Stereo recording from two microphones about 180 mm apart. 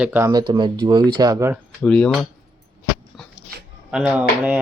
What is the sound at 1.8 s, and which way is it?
Speech, 5° left (ahead or behind).